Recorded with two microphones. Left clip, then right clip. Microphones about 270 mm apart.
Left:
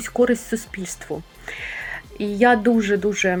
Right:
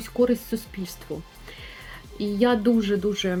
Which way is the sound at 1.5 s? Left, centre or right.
Centre.